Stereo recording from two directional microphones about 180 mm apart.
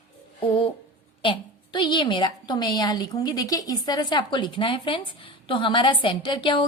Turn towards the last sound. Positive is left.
turn(degrees=25)  # may be behind; listen again after turning